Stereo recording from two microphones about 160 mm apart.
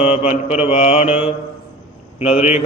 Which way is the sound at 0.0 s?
45° left (ahead or behind).